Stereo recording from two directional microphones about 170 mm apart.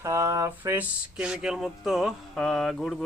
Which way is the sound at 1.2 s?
5° right (ahead or behind).